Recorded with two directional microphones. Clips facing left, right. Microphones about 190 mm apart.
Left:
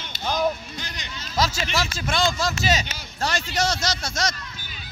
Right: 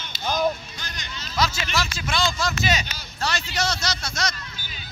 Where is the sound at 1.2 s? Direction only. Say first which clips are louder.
Left 1 dB; 40° left (ahead or behind).